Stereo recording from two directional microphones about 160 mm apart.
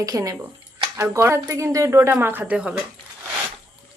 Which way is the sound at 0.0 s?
20° right (ahead or behind).